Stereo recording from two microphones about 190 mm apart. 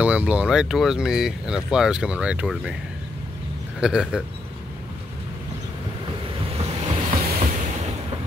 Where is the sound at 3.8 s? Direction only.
5° right (ahead or behind).